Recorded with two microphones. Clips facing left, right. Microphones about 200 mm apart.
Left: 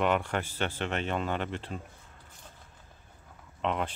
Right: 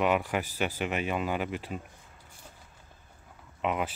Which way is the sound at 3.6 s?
5° right (ahead or behind).